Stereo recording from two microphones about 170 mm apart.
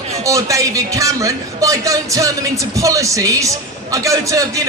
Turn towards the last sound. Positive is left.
turn(degrees=-20)  # may be behind; listen again after turning